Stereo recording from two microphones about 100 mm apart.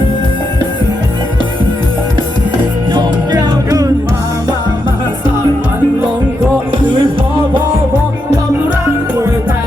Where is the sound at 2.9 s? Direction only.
45° right (ahead or behind).